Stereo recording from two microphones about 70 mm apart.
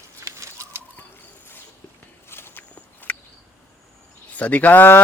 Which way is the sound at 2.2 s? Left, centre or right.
Left.